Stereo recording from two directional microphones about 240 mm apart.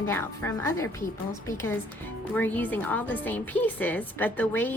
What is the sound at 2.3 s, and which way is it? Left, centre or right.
A woman's voice, centre.